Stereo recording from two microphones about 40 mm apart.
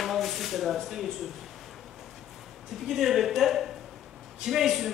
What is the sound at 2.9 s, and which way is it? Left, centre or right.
Speech, centre.